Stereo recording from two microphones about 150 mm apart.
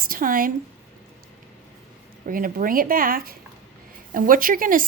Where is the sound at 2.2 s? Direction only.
65° right (ahead or behind).